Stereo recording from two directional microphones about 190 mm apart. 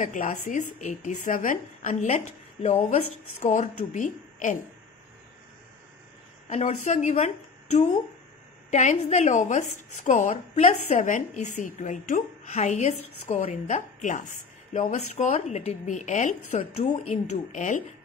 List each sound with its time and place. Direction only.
0.0 s a woman's voice: 45° left (ahead or behind)
6.5 s a woman's voice: 35° left (ahead or behind)